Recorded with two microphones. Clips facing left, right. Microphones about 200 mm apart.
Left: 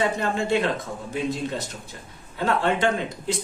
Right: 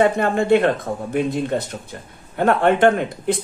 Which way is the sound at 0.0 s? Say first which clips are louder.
Right 7 dB; 55° right (ahead or behind).